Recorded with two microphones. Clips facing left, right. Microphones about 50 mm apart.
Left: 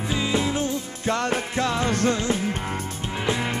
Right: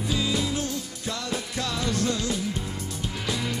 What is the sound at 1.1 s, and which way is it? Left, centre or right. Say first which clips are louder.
Music: left 7 dB; left.